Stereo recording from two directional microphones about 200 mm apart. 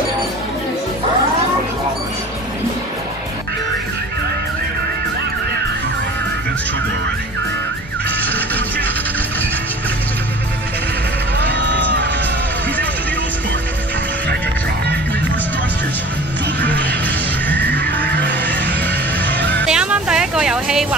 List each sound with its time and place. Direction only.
11.3 s sheep: 60° right (ahead or behind)
17.5 s music: 10° left (ahead or behind)
19.6 s music: 5° right (ahead or behind)